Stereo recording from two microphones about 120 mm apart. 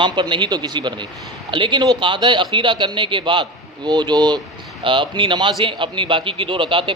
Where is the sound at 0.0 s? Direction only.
40° right (ahead or behind).